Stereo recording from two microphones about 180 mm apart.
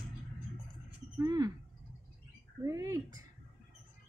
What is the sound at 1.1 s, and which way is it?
Speech, 20° right (ahead or behind).